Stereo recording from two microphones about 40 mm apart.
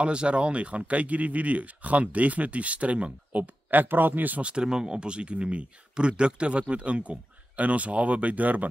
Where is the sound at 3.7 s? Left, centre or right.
Right.